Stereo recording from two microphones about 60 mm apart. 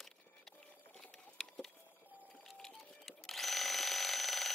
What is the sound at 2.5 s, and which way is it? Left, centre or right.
Alarm clock, centre.